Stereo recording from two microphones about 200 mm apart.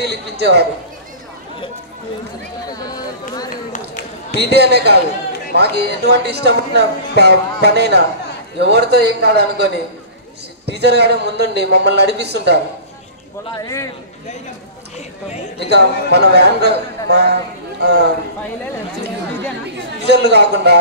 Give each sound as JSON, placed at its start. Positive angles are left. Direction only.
{"t": 0.0, "sound": "a man's voice", "side_deg": -55}
{"t": 2.7, "sound": "a sound", "side_deg": 20}
{"t": 3.9, "sound": "a sound", "side_deg": 55}
{"t": 4.5, "sound": "a man's voice", "side_deg": -55}
{"t": 13.6, "sound": "a man's voice", "side_deg": 15}
{"t": 15.6, "sound": "a man's voice", "side_deg": -55}
{"t": 20.0, "sound": "a man's voice", "side_deg": -55}